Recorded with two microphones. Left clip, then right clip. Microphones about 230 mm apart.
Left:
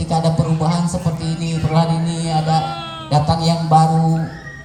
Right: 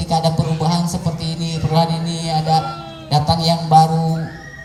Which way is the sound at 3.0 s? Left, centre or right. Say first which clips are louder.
Right 1 dB; right.